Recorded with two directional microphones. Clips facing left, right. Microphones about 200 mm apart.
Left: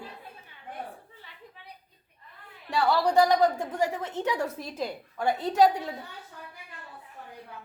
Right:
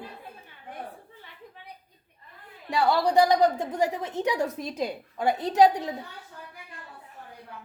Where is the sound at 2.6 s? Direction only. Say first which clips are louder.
Right 1 dB; 15° right (ahead or behind).